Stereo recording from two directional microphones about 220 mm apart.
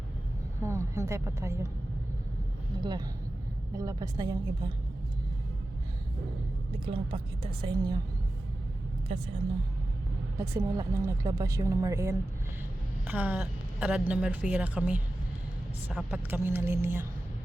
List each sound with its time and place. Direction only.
0.6 s a woman's voice: 10° right (ahead or behind)
2.7 s a woman's voice: 20° right (ahead or behind)
6.7 s a woman's voice: 25° right (ahead or behind)
9.1 s a woman's voice: 25° right (ahead or behind)
10.3 s a woman's voice: 15° right (ahead or behind)